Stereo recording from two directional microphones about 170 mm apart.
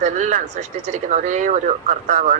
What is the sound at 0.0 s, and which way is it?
Speech, 45° right (ahead or behind).